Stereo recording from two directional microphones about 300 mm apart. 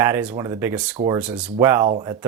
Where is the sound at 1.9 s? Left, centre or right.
Centre.